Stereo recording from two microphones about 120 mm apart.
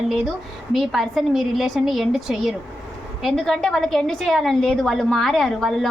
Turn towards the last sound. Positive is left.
turn(degrees=0)  # may be behind; listen again after turning